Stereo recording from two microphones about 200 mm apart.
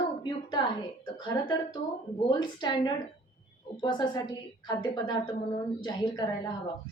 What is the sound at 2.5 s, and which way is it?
A woman's voice, 20° left (ahead or behind).